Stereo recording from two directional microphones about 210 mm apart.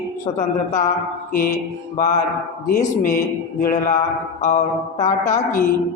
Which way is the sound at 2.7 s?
45° left (ahead or behind).